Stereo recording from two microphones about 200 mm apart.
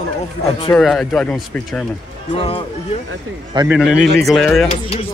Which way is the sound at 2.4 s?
30° left (ahead or behind).